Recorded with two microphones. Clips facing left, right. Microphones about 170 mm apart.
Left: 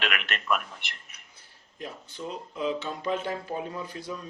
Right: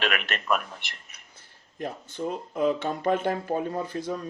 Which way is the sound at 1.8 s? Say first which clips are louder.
Right 6 dB; 50° right (ahead or behind).